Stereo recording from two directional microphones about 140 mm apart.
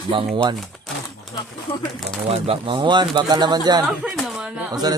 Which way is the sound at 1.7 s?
40° left (ahead or behind).